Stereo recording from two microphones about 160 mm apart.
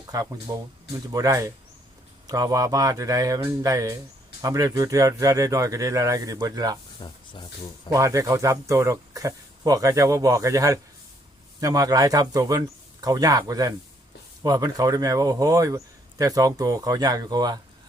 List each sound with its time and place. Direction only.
0.1 s speech: 25° right (ahead or behind)
7.0 s speech: 30° left (ahead or behind)
7.9 s speech: 20° right (ahead or behind)